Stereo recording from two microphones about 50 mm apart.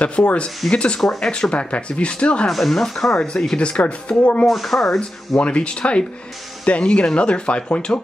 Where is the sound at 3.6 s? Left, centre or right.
Left.